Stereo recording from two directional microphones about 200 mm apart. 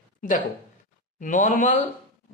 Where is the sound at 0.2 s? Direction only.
40° left (ahead or behind).